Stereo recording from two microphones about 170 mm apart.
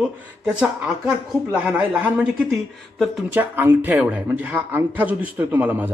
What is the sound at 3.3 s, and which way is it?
A man's voice, 10° right (ahead or behind).